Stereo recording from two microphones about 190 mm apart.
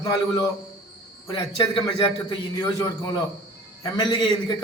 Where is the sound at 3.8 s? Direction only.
20° left (ahead or behind).